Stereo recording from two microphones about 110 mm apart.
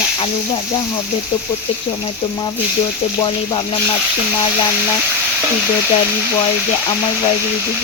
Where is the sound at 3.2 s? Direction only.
45° left (ahead or behind).